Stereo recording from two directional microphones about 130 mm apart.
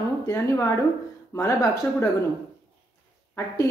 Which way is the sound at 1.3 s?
25° left (ahead or behind).